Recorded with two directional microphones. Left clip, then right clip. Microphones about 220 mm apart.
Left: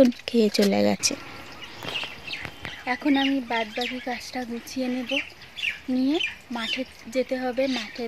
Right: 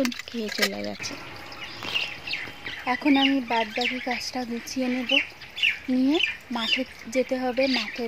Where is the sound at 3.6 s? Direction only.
20° right (ahead or behind).